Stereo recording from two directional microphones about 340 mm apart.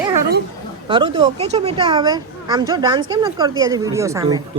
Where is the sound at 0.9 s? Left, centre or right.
Centre.